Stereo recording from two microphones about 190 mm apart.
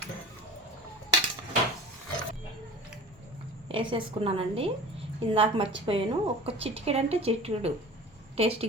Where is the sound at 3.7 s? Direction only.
25° right (ahead or behind).